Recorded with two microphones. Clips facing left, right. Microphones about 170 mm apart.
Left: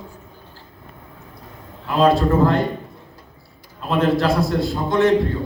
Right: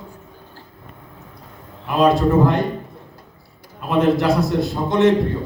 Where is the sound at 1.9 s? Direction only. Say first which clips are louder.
Right 1 dB; 15° right (ahead or behind).